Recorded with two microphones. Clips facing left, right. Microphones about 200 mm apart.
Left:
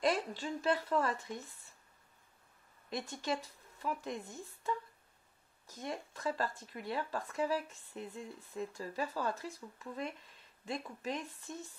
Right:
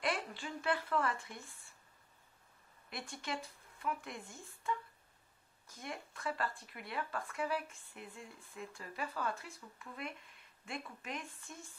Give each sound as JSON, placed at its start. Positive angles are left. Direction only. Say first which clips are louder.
{"t": 0.0, "sound": "speech", "louder": "left 5 dB", "side_deg": 40}
{"t": 3.1, "sound": "speech", "louder": "left 3 dB", "side_deg": 40}